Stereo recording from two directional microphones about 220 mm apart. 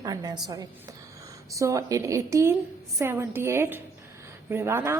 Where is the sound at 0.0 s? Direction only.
15° right (ahead or behind).